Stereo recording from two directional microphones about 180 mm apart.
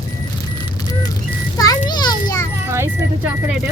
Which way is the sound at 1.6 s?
20° left (ahead or behind).